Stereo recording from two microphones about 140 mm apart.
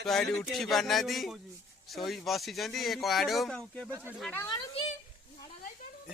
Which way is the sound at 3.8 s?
15° right (ahead or behind).